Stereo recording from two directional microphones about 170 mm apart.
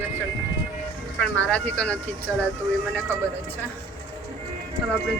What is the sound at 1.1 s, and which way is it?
Speech, 5° left (ahead or behind).